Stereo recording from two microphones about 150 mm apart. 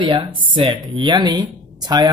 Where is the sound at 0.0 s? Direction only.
35° right (ahead or behind).